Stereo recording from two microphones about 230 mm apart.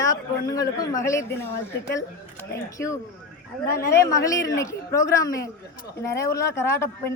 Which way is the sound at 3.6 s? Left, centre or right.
Left.